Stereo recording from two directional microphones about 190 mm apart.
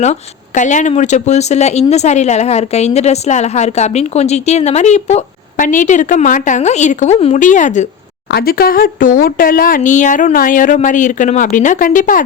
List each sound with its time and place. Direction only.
0.0 s speech: 40° left (ahead or behind)
8.3 s speech: 55° left (ahead or behind)